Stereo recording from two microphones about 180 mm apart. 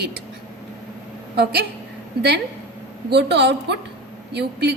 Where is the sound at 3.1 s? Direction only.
70° right (ahead or behind).